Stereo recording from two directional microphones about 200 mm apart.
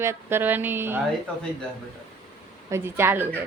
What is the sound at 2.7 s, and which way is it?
Speech, 10° right (ahead or behind).